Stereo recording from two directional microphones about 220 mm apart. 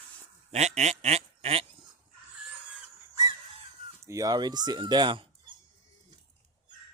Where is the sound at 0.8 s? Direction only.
30° right (ahead or behind).